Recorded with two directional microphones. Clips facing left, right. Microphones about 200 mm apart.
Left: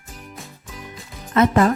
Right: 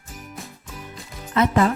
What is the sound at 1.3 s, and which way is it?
Speech, 55° left (ahead or behind).